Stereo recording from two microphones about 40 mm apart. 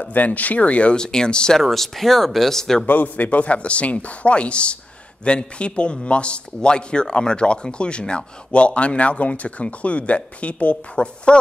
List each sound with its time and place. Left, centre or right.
0.0 s speech: left
0.9 s a man's voice: centre
1.6 s speech: centre
2.9 s a man's voice: left